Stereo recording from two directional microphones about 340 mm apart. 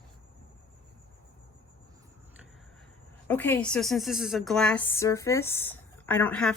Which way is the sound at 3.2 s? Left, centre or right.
Centre.